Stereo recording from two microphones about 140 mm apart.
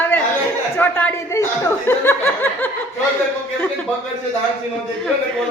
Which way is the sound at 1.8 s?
15° left (ahead or behind).